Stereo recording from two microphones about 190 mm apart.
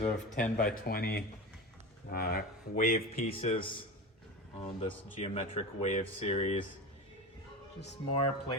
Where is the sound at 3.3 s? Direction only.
30° left (ahead or behind).